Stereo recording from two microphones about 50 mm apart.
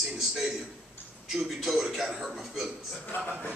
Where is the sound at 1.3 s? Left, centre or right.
Centre.